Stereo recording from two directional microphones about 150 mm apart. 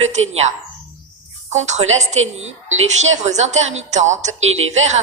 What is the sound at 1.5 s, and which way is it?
A woman's voice, 50° right (ahead or behind).